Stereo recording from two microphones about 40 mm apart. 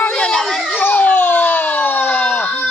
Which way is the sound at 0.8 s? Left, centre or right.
Left.